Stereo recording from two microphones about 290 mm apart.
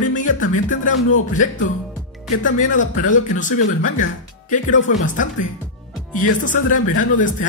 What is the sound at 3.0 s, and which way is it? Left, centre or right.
Speech, left.